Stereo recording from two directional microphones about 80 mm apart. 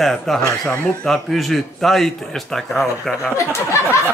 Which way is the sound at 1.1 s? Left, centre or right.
Centre.